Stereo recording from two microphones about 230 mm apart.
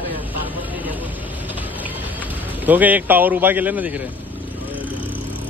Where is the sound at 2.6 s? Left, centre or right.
Centre.